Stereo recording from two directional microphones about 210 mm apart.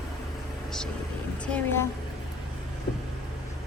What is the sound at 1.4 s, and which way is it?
Speech, 10° left (ahead or behind).